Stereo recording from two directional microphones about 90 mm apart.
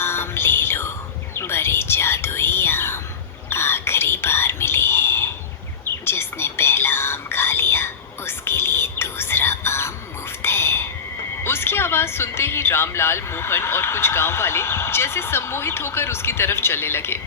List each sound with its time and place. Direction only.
0.0 s whispering: 25° left (ahead or behind)
6.1 s music: 30° left (ahead or behind)
11.4 s a sound: 25° left (ahead or behind)